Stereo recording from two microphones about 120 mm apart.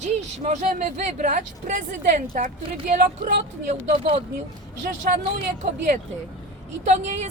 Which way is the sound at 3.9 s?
55° right (ahead or behind).